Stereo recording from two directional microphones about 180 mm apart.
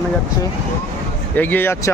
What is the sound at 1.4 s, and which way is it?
Speech, 10° left (ahead or behind).